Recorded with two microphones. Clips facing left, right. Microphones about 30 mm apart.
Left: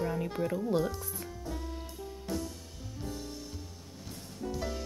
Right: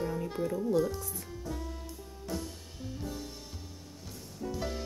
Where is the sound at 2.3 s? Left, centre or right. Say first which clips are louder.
Left 1 dB; left.